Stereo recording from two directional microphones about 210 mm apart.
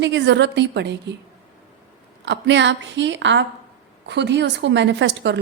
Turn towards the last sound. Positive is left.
turn(degrees=-55)  # may be behind; listen again after turning